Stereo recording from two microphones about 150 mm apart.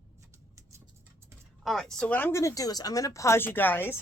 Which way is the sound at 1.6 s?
5° left (ahead or behind).